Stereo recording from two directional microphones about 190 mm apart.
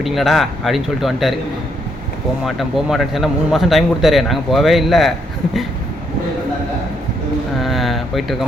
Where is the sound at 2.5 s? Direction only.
Centre (ahead or behind).